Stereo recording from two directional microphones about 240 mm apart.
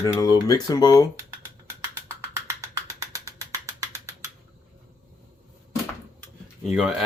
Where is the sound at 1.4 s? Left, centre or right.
Centre.